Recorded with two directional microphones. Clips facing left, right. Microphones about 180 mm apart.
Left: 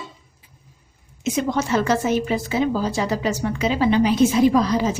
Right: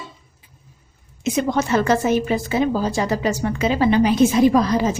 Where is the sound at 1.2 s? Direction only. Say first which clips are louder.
Right 2 dB; 60° right (ahead or behind).